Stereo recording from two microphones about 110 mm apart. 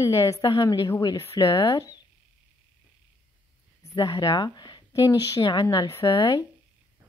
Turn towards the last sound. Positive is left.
turn(degrees=40)  # may be behind; listen again after turning